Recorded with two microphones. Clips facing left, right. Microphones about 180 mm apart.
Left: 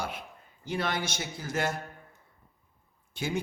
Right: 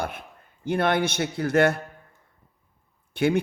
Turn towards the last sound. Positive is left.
turn(degrees=-65)  # may be behind; listen again after turning